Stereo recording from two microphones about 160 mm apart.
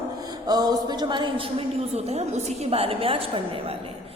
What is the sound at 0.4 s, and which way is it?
A woman's voice, 25° right (ahead or behind).